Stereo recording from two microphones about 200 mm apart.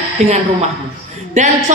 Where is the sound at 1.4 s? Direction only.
35° right (ahead or behind).